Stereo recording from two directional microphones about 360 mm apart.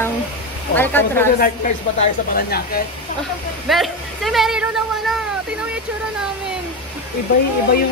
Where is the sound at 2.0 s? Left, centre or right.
Left.